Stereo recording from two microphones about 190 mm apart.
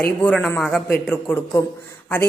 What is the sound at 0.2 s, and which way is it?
A man's voice, 5° left (ahead or behind).